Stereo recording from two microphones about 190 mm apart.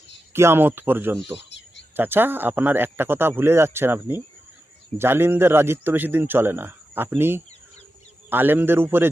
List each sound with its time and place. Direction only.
0.3 s speech: 15° right (ahead or behind)
1.4 s a sound: 70° left (ahead or behind)
2.0 s speech: 10° right (ahead or behind)